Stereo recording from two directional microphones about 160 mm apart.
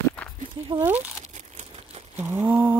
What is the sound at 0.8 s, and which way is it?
Speech, 10° right (ahead or behind).